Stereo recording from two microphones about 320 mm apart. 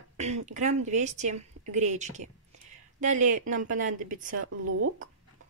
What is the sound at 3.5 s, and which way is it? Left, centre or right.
Speech, right.